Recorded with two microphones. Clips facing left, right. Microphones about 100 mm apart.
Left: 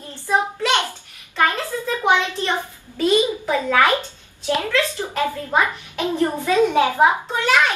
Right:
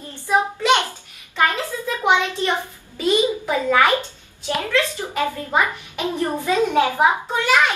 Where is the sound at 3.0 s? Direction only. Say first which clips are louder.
Left 1 dB; 15° right (ahead or behind).